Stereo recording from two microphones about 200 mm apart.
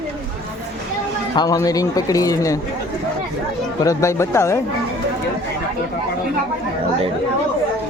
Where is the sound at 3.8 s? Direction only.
15° left (ahead or behind).